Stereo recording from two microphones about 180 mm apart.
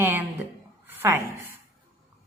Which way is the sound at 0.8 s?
15° right (ahead or behind).